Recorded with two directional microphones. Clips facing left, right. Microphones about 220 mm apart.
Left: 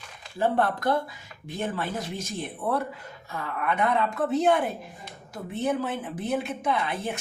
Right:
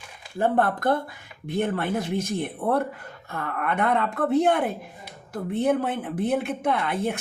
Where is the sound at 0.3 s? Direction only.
50° right (ahead or behind).